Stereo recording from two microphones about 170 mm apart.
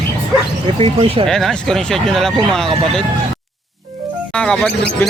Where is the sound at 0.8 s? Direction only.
35° right (ahead or behind).